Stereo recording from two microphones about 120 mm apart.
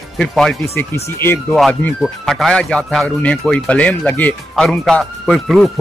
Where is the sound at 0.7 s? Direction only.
20° left (ahead or behind).